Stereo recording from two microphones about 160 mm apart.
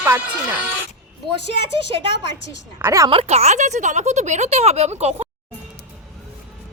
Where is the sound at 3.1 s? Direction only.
35° right (ahead or behind).